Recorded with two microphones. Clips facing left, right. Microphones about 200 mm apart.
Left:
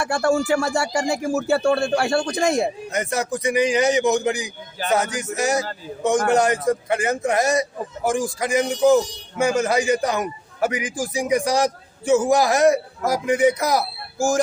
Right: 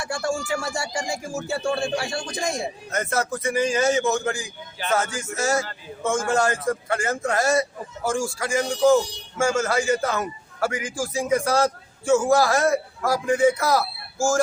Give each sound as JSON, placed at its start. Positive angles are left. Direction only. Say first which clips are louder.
{"t": 0.0, "sound": "speech", "louder": "left 7 dB", "side_deg": 65}
{"t": 2.9, "sound": "a man's voice", "louder": "left 2 dB", "side_deg": 15}